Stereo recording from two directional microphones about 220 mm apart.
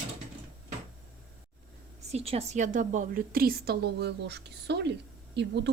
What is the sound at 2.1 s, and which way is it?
A woman's voice, 25° right (ahead or behind).